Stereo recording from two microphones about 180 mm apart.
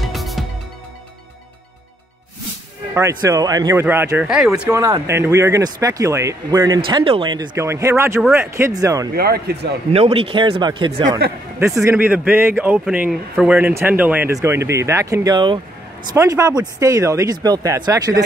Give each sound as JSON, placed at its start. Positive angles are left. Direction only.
{"t": 0.0, "sound": "music", "side_deg": 0}
{"t": 2.9, "sound": "a man's voice", "side_deg": -15}
{"t": 4.6, "sound": "a man's voice", "side_deg": -20}
{"t": 9.1, "sound": "speech", "side_deg": -60}
{"t": 9.9, "sound": "speech", "side_deg": -35}
{"t": 11.8, "sound": "a man's voice", "side_deg": -10}